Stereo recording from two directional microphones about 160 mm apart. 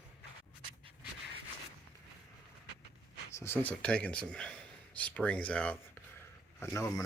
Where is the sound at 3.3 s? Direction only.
15° left (ahead or behind).